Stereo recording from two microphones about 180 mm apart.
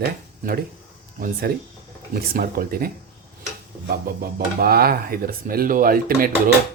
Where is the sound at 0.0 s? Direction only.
55° right (ahead or behind).